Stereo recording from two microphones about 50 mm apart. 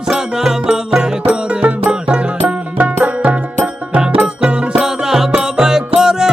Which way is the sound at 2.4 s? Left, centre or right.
Right.